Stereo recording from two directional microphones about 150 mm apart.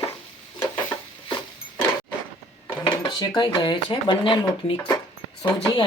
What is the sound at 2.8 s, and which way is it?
Speech, 30° left (ahead or behind).